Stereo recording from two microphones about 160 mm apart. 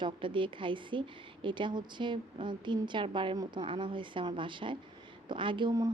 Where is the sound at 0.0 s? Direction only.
30° right (ahead or behind).